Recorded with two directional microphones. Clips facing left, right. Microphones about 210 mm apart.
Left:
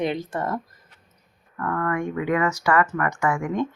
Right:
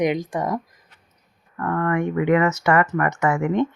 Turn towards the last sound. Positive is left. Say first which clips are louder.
# right 4 dB
turn(degrees=-20)  # may be behind; listen again after turning